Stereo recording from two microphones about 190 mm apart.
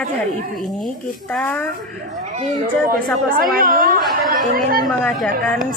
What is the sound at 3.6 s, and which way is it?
Speech, 50° right (ahead or behind).